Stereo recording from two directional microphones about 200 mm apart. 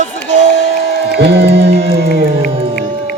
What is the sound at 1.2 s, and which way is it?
Music, 55° right (ahead or behind).